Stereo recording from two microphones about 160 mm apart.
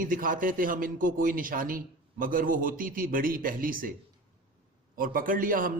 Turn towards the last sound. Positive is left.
turn(degrees=-60)  # may be behind; listen again after turning